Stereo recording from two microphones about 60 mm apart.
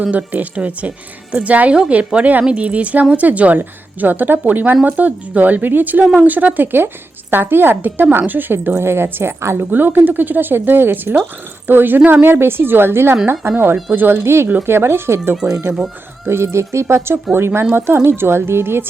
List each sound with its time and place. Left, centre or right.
0.0 s a woman's voice: right
9.4 s speech: right
9.7 s a woman's voice: right
13.9 s a woman's voice: right